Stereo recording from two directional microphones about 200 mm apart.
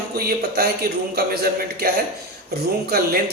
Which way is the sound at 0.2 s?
50° right (ahead or behind).